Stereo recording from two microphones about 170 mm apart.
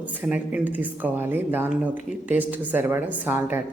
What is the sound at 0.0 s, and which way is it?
A woman's voice, 10° right (ahead or behind).